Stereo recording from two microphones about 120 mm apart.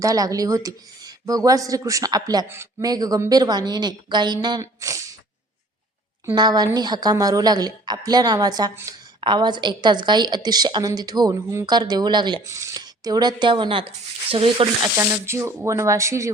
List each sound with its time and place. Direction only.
0.0 s speech: 30° right (ahead or behind)
4.6 s speech: 25° right (ahead or behind)
6.3 s speech: 35° right (ahead or behind)
8.7 s speech: 20° right (ahead or behind)
9.2 s speech: 40° right (ahead or behind)
12.5 s speech: 25° right (ahead or behind); by 14.7 s 50° right (ahead or behind)
14.9 s speech: 20° right (ahead or behind)